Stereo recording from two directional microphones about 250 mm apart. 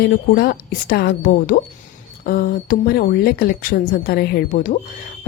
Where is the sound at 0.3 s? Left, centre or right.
Left.